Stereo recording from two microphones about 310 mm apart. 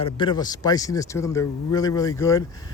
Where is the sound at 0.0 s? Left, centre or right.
Centre.